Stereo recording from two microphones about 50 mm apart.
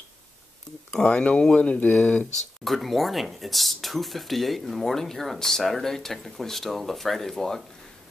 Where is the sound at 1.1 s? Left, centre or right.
Left.